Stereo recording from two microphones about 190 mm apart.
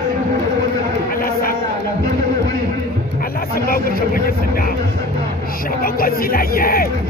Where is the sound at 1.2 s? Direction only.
50° left (ahead or behind).